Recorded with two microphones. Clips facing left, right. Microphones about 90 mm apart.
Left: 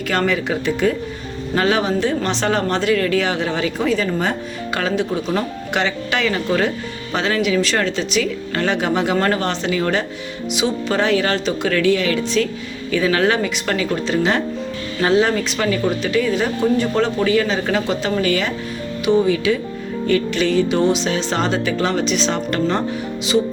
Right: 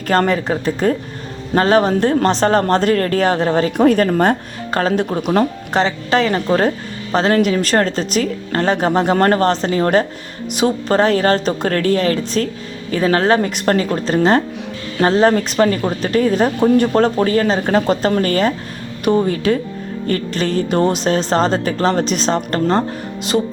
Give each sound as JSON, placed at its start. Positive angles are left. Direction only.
{"t": 0.1, "sound": "speech", "side_deg": -40}
{"t": 4.8, "sound": "speech", "side_deg": -40}